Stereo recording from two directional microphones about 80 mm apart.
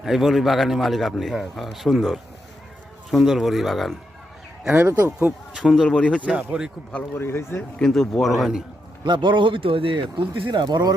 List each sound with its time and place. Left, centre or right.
0.0 s speech: centre
5.5 s speech: centre
5.8 s speech: centre
6.2 s speech: centre
7.1 s a man's voice: left
7.8 s speech: centre
9.0 s speech: right